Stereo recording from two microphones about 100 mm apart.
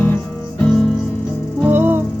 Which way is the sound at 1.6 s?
20° right (ahead or behind).